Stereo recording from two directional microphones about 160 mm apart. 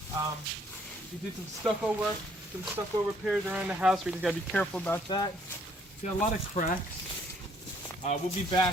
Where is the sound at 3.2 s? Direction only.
Centre (ahead or behind).